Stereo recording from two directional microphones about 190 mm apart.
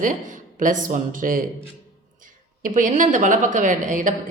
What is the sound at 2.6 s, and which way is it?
A woman's voice, 45° right (ahead or behind).